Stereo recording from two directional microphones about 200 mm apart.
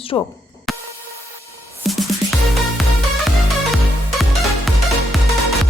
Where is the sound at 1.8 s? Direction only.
Centre (ahead or behind).